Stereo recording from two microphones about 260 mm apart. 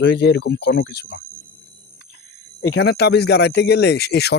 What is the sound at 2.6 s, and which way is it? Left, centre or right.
Speech, left.